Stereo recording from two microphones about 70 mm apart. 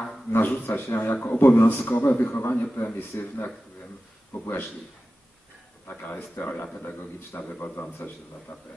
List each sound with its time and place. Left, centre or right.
0.3 s a man's voice: left
5.9 s a man's voice: left